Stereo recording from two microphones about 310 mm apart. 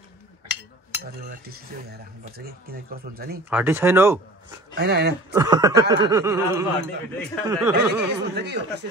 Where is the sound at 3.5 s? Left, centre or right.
Centre.